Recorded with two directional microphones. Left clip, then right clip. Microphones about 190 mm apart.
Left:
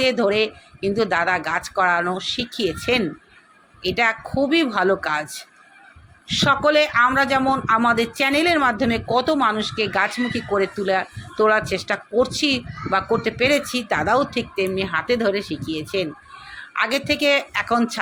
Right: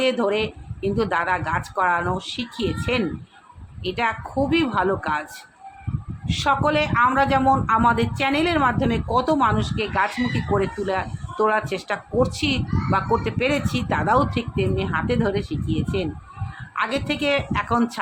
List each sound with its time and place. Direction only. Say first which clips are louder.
0.0 s a man's voice: left 3 dB; 5° left (ahead or behind)